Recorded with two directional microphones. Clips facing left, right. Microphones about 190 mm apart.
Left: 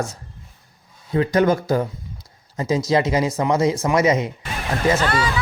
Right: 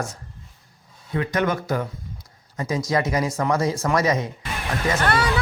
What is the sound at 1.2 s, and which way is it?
Speech, 30° left (ahead or behind).